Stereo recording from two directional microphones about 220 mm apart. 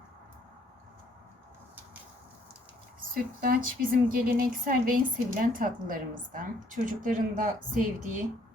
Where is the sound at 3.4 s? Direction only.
40° right (ahead or behind).